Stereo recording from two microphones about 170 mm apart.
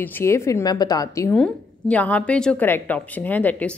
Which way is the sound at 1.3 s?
5° left (ahead or behind).